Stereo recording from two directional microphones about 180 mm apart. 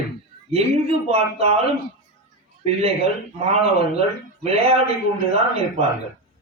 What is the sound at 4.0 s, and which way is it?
A man's voice, 35° right (ahead or behind).